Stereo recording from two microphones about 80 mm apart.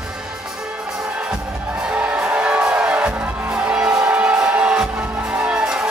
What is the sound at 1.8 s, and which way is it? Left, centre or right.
Music, centre.